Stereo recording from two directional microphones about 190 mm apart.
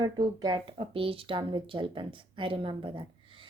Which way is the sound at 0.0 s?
20° right (ahead or behind).